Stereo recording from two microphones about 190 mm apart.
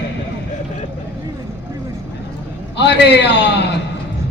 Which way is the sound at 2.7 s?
65° left (ahead or behind).